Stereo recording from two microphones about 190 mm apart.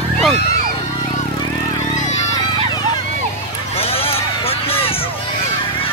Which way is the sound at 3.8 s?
30° left (ahead or behind).